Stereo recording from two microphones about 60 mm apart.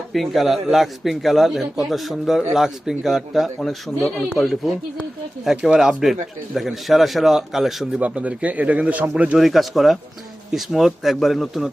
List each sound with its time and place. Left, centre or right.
0.1 s speech: centre
5.5 s speech: centre
8.0 s speech: right
9.4 s speech: centre